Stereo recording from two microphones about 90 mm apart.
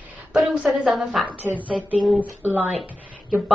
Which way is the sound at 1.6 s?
15° right (ahead or behind).